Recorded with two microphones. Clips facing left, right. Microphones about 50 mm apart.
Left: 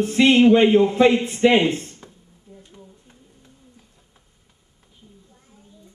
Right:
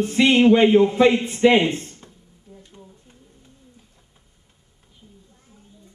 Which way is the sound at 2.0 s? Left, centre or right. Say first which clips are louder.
Left 1 dB; centre.